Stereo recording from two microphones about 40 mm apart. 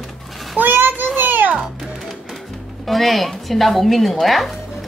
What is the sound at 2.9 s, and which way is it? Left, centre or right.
Speech, centre.